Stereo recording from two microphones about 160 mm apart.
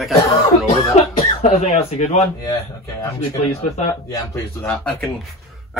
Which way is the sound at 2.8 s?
20° left (ahead or behind).